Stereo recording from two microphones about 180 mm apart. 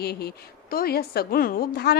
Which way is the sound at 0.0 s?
60° left (ahead or behind).